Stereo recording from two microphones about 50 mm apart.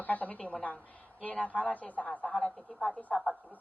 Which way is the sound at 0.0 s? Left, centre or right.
Left.